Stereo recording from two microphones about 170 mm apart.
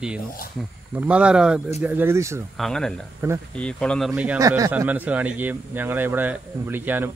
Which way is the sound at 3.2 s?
15° right (ahead or behind).